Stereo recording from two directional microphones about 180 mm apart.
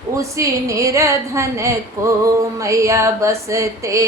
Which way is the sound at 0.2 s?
15° right (ahead or behind).